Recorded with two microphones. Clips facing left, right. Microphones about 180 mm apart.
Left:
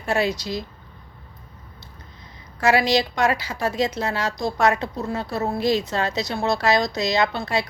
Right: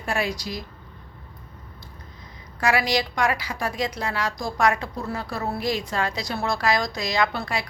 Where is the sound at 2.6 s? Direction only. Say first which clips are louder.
Left 4 dB; 25° left (ahead or behind).